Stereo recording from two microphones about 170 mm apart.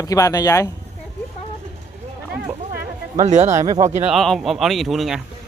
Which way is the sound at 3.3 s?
45° right (ahead or behind).